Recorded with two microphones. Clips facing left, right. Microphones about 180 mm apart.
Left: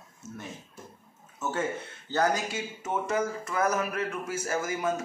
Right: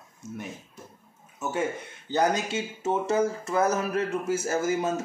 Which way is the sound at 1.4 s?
10° right (ahead or behind).